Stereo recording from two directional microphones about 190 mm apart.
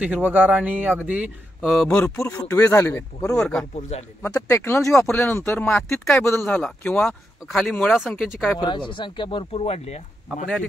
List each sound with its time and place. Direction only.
0.0 s speech: 10° right (ahead or behind)
8.6 s speech: 25° left (ahead or behind)